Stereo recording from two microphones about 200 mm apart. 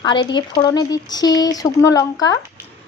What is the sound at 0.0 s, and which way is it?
Speech, 20° left (ahead or behind).